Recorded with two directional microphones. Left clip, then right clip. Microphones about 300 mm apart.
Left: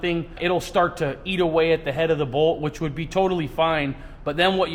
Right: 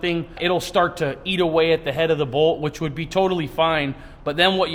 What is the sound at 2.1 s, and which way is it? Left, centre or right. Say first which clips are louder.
Speech: right 2 dB; right.